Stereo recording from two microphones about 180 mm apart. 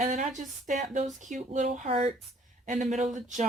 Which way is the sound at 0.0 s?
40° right (ahead or behind).